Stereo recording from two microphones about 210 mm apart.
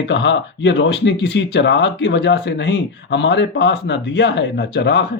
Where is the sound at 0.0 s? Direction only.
60° left (ahead or behind).